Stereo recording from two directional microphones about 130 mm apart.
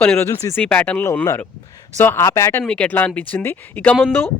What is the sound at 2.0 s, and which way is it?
Speech, 20° left (ahead or behind).